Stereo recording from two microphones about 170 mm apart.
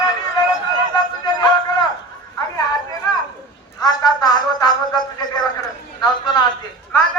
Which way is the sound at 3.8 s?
25° left (ahead or behind).